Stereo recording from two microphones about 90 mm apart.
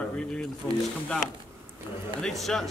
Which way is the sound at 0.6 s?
20° left (ahead or behind).